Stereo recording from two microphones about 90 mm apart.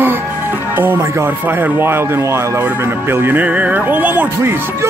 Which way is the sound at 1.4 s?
20° right (ahead or behind).